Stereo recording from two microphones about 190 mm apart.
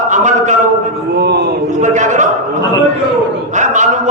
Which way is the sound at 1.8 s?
40° right (ahead or behind).